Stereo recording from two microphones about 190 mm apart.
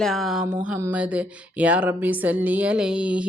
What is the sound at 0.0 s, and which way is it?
Speech, centre (ahead or behind).